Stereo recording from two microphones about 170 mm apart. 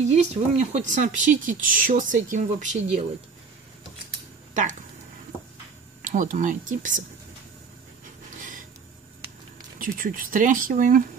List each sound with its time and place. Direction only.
0.0 s speech: 40° right (ahead or behind)
6.0 s speech: 50° right (ahead or behind)
8.4 s a sound: 50° right (ahead or behind)
9.8 s speech: 50° right (ahead or behind)